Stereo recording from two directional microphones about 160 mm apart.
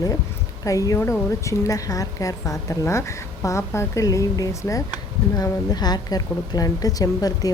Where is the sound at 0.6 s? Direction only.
20° left (ahead or behind).